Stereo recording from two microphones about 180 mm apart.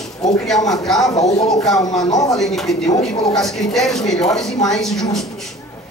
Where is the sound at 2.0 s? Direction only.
20° left (ahead or behind).